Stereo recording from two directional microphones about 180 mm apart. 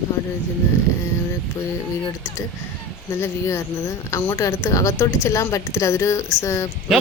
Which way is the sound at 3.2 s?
15° left (ahead or behind).